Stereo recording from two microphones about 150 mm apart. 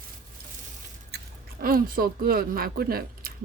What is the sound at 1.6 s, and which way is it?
Speech, 75° right (ahead or behind).